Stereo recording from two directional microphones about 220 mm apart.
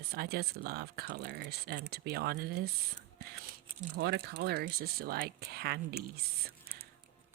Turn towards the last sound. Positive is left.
turn(degrees=-45)  # may be behind; listen again after turning